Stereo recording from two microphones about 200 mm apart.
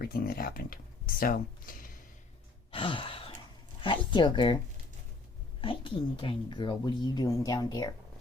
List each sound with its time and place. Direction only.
0.0 s speech: 50° left (ahead or behind)
2.7 s sigh: 25° left (ahead or behind)
3.8 s speech: 25° left (ahead or behind)